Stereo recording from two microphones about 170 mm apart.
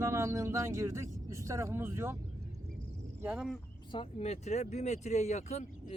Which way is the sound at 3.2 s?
5° right (ahead or behind).